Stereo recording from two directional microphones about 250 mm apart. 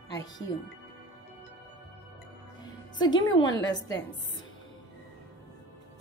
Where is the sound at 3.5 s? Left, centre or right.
Left.